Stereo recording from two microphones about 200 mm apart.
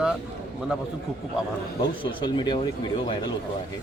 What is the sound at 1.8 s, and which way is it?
Speech, 20° left (ahead or behind).